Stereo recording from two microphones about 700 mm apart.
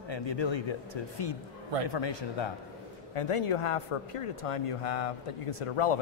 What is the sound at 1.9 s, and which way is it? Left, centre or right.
Speech, left.